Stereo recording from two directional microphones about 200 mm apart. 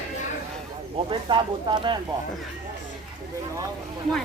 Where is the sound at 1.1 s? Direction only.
25° right (ahead or behind).